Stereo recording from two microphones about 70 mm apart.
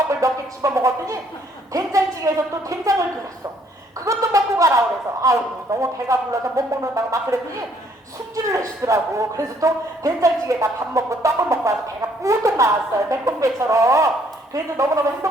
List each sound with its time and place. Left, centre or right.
0.2 s a man's voice: right
4.0 s a sound: right
5.2 s a man's voice: right
8.4 s a man's voice: right